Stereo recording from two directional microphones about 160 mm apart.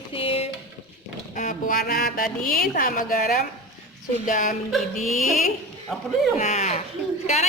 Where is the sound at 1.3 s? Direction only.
55° left (ahead or behind).